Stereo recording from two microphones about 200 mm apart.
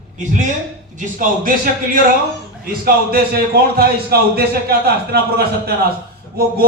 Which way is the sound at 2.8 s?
50° right (ahead or behind).